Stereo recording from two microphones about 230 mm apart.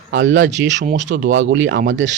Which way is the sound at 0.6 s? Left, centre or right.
Right.